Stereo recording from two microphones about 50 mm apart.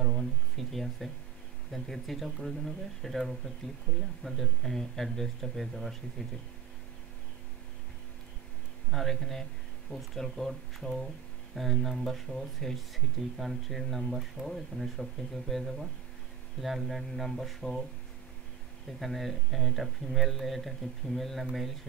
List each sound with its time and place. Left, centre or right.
0.0 s a sound: centre
1.7 s speech: centre
8.9 s speech: centre
18.9 s speech: centre